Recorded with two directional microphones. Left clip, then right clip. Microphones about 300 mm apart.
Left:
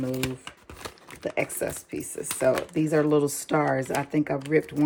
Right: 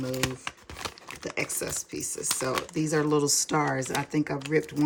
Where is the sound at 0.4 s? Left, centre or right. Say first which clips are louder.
Right 4 dB; centre.